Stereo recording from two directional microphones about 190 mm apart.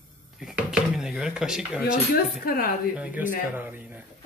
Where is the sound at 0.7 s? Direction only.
5° right (ahead or behind).